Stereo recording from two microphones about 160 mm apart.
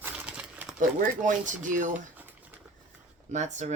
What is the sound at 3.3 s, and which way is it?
Speech, 45° right (ahead or behind).